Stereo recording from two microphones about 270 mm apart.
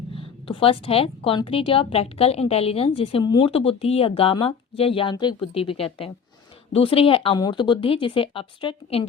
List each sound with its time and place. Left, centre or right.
0.1 s a woman's voice: centre